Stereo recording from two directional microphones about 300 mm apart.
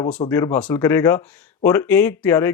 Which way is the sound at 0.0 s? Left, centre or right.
Centre.